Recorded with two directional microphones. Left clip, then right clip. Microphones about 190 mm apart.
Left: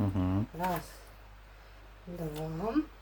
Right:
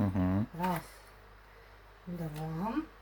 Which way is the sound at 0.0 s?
5° left (ahead or behind).